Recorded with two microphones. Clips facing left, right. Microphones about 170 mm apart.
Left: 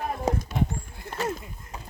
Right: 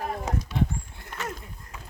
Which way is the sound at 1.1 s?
30° left (ahead or behind).